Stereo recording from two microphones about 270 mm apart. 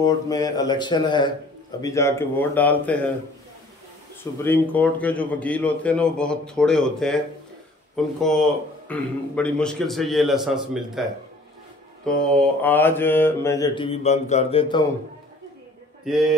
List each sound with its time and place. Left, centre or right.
0.0 s mantra: centre
4.2 s a man's voice: centre
12.0 s mantra: centre
16.1 s a man's voice: centre